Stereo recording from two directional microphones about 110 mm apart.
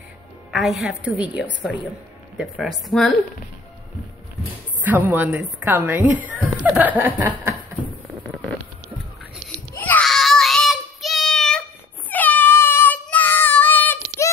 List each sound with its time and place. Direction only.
0.5 s a woman's voice: 5° right (ahead or behind)
4.8 s a woman's voice: 15° right (ahead or behind)
9.8 s a sound: 15° left (ahead or behind)
10.0 s child singing: centre (ahead or behind)
12.1 s cat: 15° left (ahead or behind)
13.0 s child singing: 15° left (ahead or behind)